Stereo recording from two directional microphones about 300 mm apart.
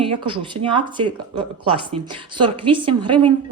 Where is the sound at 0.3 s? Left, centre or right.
Centre.